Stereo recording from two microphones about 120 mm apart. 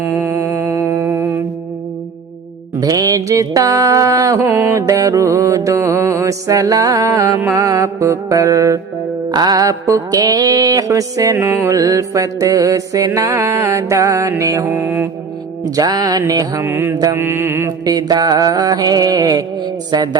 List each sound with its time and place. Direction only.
0.3 s music: 20° right (ahead or behind)
0.9 s mantra: 20° right (ahead or behind)
2.8 s mantra: 30° right (ahead or behind)
4.4 s music: 20° right (ahead or behind)
9.3 s mantra: 35° right (ahead or behind); by 15.1 s 15° right (ahead or behind)
15.7 s mantra: 35° right (ahead or behind)
16.6 s mantra: 20° right (ahead or behind)
17.8 s mantra: 35° right (ahead or behind)